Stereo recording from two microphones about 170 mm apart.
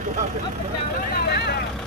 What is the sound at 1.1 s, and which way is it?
Speech, 70° left (ahead or behind).